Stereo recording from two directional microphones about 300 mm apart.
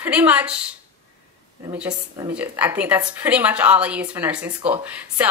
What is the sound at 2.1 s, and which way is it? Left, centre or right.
A woman's voice, centre.